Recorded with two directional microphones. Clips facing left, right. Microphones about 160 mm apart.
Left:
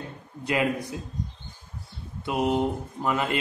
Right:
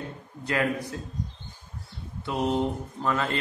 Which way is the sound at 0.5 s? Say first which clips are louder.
Left 1 dB; 15° left (ahead or behind).